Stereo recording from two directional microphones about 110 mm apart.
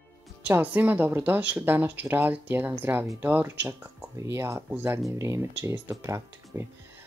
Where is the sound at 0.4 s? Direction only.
15° right (ahead or behind).